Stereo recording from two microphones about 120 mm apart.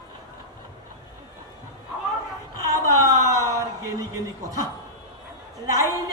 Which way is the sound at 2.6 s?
30° right (ahead or behind).